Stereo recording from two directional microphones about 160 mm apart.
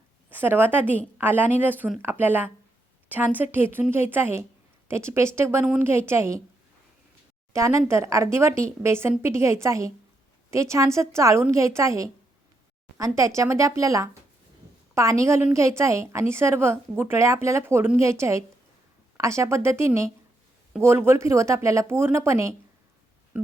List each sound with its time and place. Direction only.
0.3 s a woman's voice: 10° right (ahead or behind)
7.5 s a woman's voice: 20° right (ahead or behind)
13.1 s a woman's voice: 20° right (ahead or behind)